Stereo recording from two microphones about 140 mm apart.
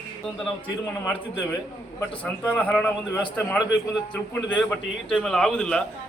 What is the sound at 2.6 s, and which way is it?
Speech, 10° left (ahead or behind).